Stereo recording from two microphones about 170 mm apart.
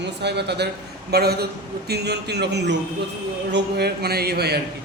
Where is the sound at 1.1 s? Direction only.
70° right (ahead or behind).